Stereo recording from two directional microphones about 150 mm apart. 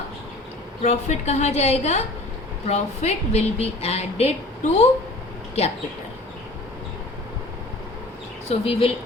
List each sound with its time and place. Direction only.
0.8 s a woman's voice: 45° left (ahead or behind)
8.4 s speech: 40° left (ahead or behind)